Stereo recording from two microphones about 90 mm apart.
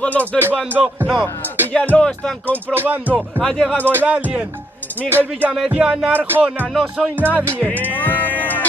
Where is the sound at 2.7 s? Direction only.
20° right (ahead or behind).